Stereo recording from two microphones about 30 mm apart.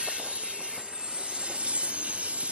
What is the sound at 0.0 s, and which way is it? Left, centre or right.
Train, right.